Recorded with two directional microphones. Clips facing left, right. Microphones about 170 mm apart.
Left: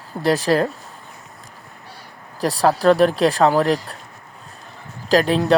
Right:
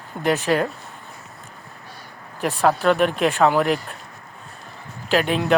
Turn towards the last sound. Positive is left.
turn(degrees=35)  # may be behind; listen again after turning